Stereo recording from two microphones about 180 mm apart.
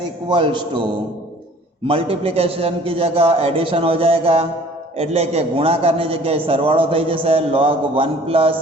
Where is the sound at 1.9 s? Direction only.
30° right (ahead or behind).